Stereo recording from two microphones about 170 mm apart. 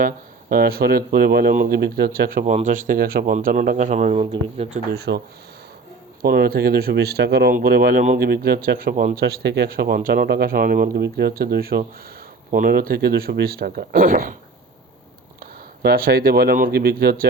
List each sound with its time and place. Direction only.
0.5 s speech: 65° right (ahead or behind); by 4.8 s 35° right (ahead or behind)
4.9 s speech: 75° right (ahead or behind)
6.2 s speech: 65° right (ahead or behind)
15.4 s speech: 65° right (ahead or behind)